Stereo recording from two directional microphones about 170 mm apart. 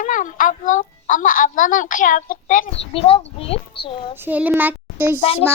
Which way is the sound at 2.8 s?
35° left (ahead or behind).